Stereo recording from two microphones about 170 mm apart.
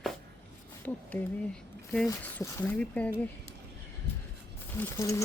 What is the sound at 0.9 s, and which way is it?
Speech, 10° left (ahead or behind).